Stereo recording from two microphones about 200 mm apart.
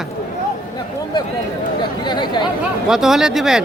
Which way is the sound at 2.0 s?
20° left (ahead or behind).